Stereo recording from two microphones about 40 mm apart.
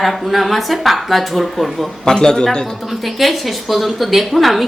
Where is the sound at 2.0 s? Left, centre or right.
Centre.